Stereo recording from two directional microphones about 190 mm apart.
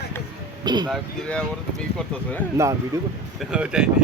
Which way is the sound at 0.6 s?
20° right (ahead or behind).